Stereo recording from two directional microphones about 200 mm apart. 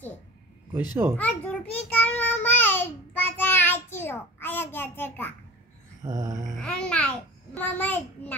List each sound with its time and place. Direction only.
1.1 s child singing: 5° left (ahead or behind)
6.0 s a sound: 20° right (ahead or behind)
6.5 s a child's voice: 5° left (ahead or behind)